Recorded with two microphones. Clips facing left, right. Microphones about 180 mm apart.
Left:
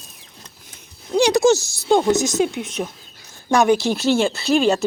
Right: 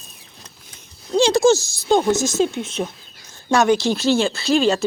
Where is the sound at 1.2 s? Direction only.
20° left (ahead or behind).